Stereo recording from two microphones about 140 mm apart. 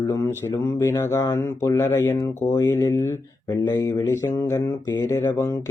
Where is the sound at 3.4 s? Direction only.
30° left (ahead or behind).